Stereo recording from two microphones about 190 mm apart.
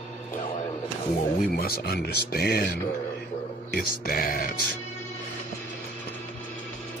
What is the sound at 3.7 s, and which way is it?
Speech, 50° left (ahead or behind).